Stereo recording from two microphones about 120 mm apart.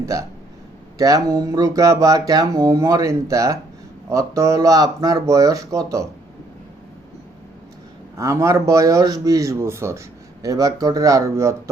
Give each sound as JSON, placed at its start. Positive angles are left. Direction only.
{"t": 0.0, "sound": "speech", "side_deg": -25}
{"t": 8.1, "sound": "speech", "side_deg": -25}